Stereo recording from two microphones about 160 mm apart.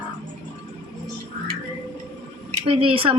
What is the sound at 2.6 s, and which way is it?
Speech, 35° right (ahead or behind).